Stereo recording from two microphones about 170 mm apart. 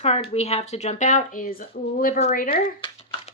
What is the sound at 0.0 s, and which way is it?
Speech, 35° left (ahead or behind).